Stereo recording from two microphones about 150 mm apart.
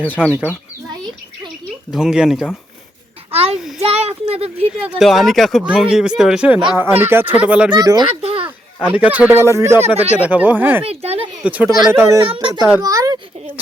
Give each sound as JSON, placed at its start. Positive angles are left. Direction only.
{"t": 0.2, "sound": "speech", "side_deg": -5}
{"t": 1.9, "sound": "speech", "side_deg": -5}
{"t": 3.3, "sound": "a child's voice", "side_deg": -40}
{"t": 4.9, "sound": "speech", "side_deg": 0}
{"t": 7.8, "sound": "speech", "side_deg": -20}
{"t": 8.2, "sound": "a sound", "side_deg": -40}
{"t": 8.4, "sound": "speech", "side_deg": -10}
{"t": 10.8, "sound": "speech", "side_deg": -40}
{"t": 11.4, "sound": "speech", "side_deg": -10}
{"t": 12.2, "sound": "a child's voice", "side_deg": -35}
{"t": 12.8, "sound": "a child's voice", "side_deg": -25}